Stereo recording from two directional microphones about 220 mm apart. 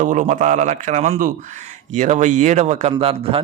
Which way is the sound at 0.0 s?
35° right (ahead or behind).